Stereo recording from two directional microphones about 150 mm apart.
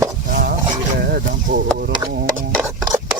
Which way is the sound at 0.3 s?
70° right (ahead or behind).